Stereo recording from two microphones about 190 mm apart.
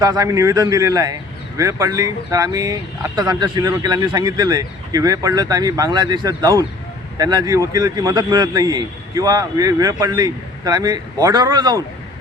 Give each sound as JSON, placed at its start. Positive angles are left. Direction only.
{"t": 0.0, "sound": "a man's voice", "side_deg": -20}